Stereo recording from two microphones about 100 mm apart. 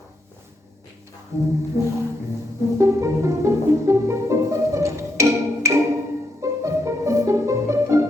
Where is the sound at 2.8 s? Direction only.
30° right (ahead or behind).